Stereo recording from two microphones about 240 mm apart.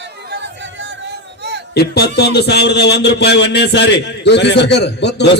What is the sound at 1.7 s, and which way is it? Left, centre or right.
A man's voice, left.